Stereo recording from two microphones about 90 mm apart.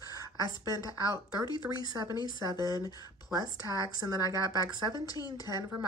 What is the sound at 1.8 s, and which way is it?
Speech, 45° right (ahead or behind).